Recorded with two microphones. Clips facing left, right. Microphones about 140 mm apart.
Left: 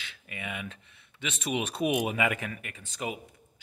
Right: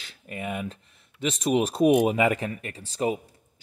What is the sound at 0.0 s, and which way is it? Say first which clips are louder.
Speech: right 6 dB; 40° right (ahead or behind).